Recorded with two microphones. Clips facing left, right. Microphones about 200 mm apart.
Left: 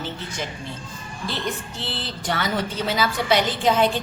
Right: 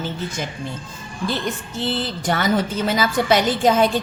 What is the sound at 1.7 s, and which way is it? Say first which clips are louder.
A woman's voice: right 8 dB; 45° right (ahead or behind).